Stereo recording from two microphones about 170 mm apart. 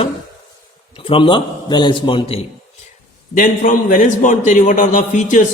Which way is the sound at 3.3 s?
50° left (ahead or behind).